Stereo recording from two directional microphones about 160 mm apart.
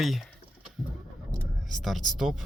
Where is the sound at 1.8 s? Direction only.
Centre (ahead or behind).